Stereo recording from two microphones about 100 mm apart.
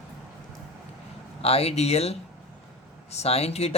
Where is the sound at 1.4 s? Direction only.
90° left.